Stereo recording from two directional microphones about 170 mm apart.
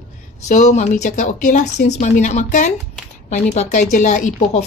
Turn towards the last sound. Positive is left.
turn(degrees=45)  # may be behind; listen again after turning